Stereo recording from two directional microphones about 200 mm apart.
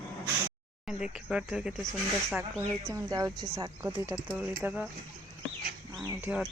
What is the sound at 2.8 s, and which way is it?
Speech, 15° right (ahead or behind).